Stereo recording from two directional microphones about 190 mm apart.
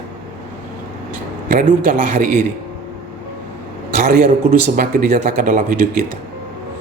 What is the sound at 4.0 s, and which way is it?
A man's voice, 50° right (ahead or behind).